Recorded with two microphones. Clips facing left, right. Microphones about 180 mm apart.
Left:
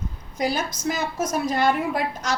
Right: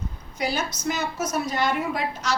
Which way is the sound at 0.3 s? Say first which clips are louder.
Left 2 dB; 45° left (ahead or behind).